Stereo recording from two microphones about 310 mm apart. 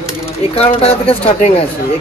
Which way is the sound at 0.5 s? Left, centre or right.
Centre.